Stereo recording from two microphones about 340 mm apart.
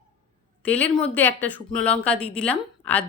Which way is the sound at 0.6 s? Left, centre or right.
Centre.